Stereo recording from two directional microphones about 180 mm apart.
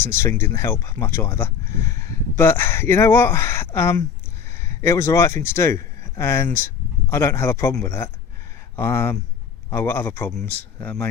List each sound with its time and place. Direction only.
0.0 s speech: 15° left (ahead or behind)